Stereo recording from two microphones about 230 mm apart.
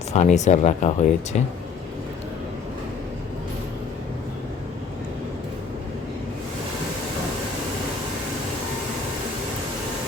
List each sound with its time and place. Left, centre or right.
0.1 s speech: left